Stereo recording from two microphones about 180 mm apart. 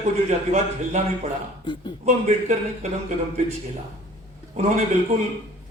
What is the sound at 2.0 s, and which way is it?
Speech, 40° right (ahead or behind).